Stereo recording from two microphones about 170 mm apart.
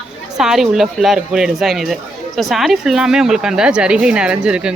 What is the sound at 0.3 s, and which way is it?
A woman's voice, 5° right (ahead or behind).